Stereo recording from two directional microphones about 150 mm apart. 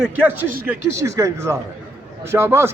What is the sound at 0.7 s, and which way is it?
Speech, 20° right (ahead or behind).